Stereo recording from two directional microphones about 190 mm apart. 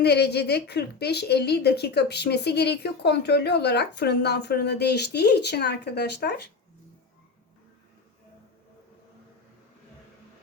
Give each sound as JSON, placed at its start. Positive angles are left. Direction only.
{"t": 0.0, "sound": "a woman's voice", "side_deg": 60}